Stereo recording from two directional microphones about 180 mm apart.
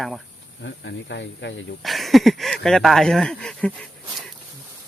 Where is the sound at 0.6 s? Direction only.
85° left.